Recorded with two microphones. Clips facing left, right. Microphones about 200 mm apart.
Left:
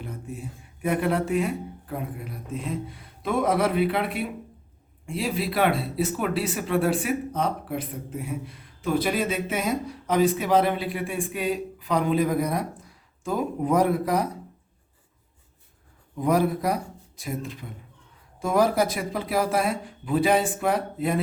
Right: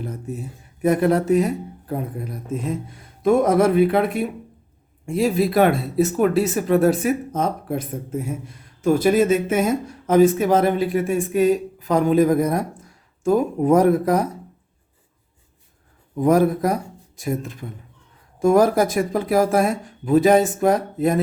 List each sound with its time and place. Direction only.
0.0 s speech: 40° right (ahead or behind)
16.2 s speech: 45° right (ahead or behind)